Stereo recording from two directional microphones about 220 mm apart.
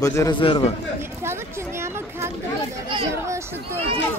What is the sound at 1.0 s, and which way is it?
Chatter, 10° right (ahead or behind).